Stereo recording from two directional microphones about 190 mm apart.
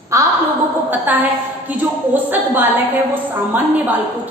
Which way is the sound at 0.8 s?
10° right (ahead or behind).